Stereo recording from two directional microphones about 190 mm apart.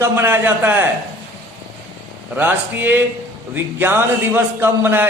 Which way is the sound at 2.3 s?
10° right (ahead or behind).